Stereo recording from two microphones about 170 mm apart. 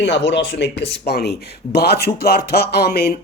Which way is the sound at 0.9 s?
70° left (ahead or behind).